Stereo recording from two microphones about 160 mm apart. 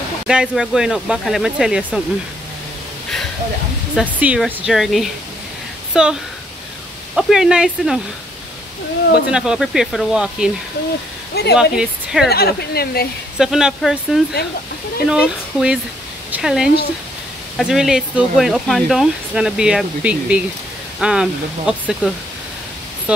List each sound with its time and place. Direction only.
0.3 s speech: 5° right (ahead or behind)
3.9 s speech: 10° right (ahead or behind)
7.2 s speech: 5° right (ahead or behind)
9.3 s speech: 5° right (ahead or behind)
11.5 s speech: 5° right (ahead or behind)
12.3 s speech: 75° left (ahead or behind)
13.4 s speech: 5° right (ahead or behind)